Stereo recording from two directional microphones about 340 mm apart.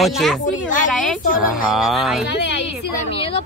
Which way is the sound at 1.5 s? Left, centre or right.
Centre.